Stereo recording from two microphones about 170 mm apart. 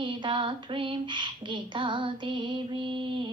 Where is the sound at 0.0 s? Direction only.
30° right (ahead or behind).